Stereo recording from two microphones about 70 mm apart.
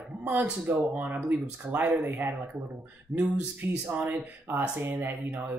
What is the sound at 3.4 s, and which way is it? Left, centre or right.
Speech, right.